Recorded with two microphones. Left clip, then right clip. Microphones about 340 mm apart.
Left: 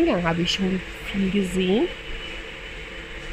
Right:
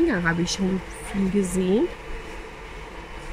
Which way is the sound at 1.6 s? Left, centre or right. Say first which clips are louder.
Left 2 dB; centre.